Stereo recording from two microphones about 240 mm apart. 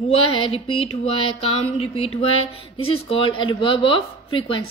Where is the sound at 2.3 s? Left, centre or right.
Left.